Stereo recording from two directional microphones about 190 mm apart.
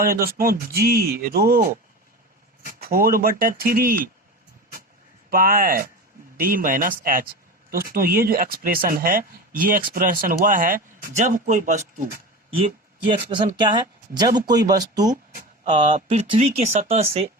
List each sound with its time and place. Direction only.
0.0 s speech: 50° right (ahead or behind)
2.6 s speech: 50° right (ahead or behind)
5.3 s speech: 50° right (ahead or behind)
12.5 s speech: 25° right (ahead or behind)